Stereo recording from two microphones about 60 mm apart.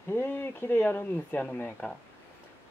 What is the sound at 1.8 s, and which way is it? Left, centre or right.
Speech, centre.